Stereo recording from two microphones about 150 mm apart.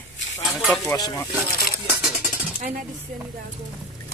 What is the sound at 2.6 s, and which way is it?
Speech, 60° right (ahead or behind).